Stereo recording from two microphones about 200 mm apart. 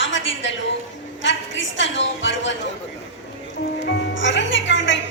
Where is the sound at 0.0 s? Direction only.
70° left (ahead or behind).